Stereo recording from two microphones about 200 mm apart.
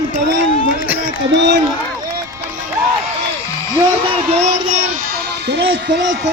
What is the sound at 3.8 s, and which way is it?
Speech, 25° right (ahead or behind).